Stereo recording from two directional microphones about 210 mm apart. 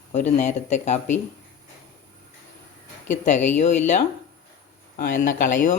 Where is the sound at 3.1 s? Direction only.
35° left (ahead or behind).